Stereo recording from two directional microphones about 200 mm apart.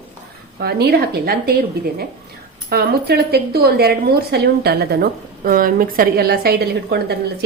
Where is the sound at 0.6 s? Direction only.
55° right (ahead or behind).